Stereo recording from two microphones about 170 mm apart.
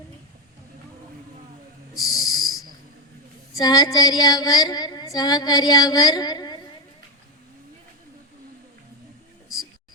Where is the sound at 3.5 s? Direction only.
20° left (ahead or behind).